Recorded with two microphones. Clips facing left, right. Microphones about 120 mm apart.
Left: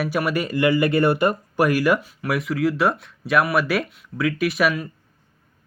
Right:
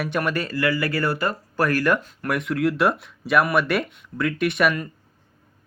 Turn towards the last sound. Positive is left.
turn(degrees=0)  # may be behind; listen again after turning